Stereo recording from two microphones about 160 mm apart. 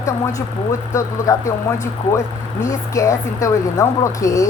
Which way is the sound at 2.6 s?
20° left (ahead or behind).